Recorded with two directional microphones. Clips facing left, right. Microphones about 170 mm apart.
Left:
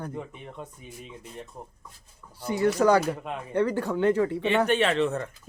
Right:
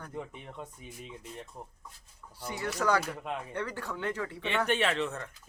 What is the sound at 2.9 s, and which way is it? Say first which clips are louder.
Speech: left 6 dB; 35° left (ahead or behind).